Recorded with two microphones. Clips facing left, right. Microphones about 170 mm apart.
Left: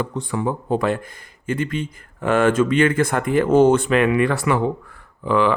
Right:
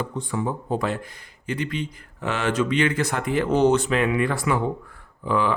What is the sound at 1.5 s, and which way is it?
Speech, 50° left (ahead or behind).